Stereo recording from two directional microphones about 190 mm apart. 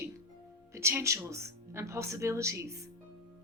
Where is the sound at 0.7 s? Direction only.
15° right (ahead or behind).